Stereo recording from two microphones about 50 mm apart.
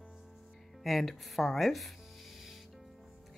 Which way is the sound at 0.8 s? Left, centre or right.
Centre.